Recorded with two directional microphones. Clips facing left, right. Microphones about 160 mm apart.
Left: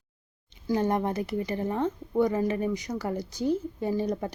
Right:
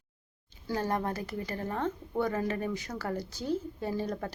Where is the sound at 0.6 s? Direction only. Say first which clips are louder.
Left 5 dB; 20° left (ahead or behind).